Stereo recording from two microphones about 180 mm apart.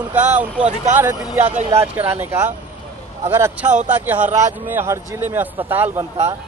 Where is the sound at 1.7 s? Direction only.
10° right (ahead or behind).